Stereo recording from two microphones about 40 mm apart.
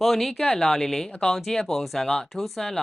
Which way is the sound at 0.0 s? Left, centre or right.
Centre.